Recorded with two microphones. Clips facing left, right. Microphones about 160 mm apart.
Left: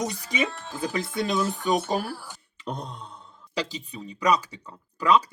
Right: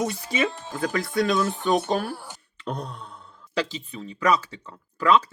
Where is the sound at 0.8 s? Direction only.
20° left (ahead or behind).